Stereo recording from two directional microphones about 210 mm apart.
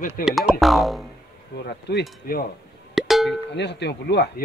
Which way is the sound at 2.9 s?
Centre (ahead or behind).